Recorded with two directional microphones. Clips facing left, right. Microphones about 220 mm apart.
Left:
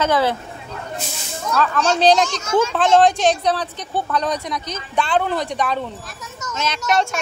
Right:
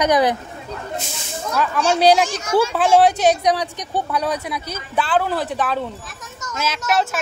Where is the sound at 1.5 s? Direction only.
10° right (ahead or behind).